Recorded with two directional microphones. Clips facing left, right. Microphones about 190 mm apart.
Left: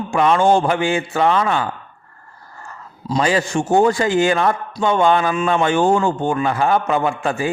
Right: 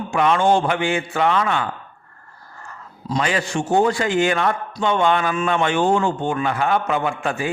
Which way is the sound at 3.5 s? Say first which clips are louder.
Left 2 dB; 45° left (ahead or behind).